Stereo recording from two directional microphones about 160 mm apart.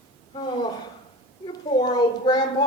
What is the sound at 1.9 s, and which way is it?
Speech, 25° left (ahead or behind).